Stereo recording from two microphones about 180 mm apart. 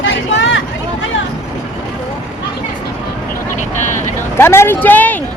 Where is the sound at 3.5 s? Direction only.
40° left (ahead or behind).